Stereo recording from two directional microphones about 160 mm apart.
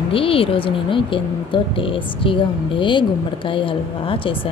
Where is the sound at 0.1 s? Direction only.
35° left (ahead or behind).